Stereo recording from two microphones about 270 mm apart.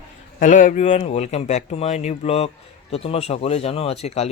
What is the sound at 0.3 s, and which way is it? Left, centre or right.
Speech, left.